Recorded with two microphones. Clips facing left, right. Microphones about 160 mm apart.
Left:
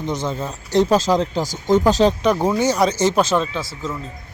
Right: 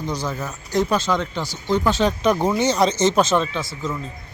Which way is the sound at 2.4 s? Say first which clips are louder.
Left 1 dB; 10° left (ahead or behind).